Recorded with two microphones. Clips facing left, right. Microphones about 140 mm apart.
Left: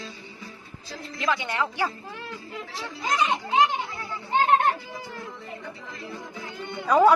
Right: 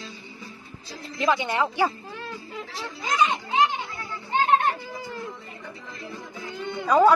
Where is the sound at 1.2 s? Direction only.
25° right (ahead or behind).